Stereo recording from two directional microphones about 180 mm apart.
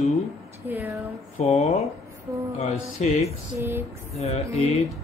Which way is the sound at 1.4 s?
40° left (ahead or behind).